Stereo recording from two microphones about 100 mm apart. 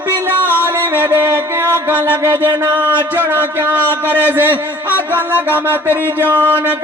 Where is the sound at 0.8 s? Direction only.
20° right (ahead or behind).